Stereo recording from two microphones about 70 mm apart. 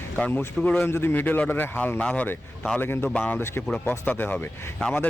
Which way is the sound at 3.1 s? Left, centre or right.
Left.